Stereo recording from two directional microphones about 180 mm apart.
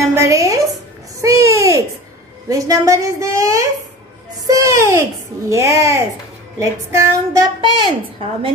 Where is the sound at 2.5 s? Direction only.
20° right (ahead or behind).